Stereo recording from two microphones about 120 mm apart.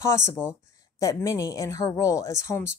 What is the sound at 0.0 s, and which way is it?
Speech, 25° left (ahead or behind).